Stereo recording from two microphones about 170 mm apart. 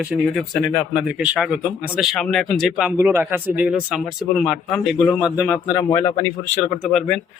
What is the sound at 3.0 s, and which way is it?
Speech, 15° right (ahead or behind).